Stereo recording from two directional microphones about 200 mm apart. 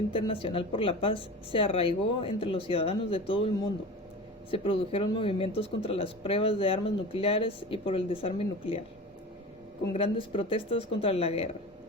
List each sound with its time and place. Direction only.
0.1 s speech: 25° left (ahead or behind)
4.5 s speech: 25° left (ahead or behind)
9.9 s speech: 25° left (ahead or behind)